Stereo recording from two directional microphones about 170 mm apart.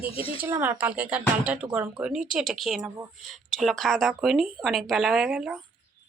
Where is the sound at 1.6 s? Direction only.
30° right (ahead or behind).